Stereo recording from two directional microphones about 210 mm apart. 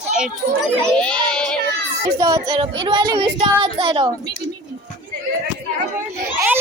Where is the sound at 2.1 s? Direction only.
20° right (ahead or behind).